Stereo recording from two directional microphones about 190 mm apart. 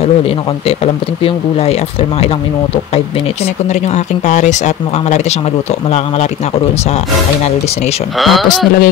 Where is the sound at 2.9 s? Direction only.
35° left (ahead or behind).